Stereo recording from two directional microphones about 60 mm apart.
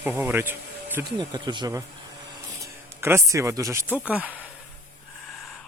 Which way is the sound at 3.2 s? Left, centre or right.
Right.